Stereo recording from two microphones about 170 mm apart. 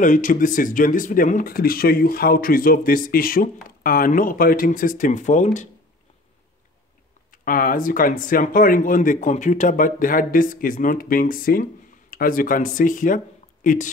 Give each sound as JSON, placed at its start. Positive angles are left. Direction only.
{"t": 0.0, "sound": "speech", "side_deg": 50}
{"t": 7.2, "sound": "speech", "side_deg": 55}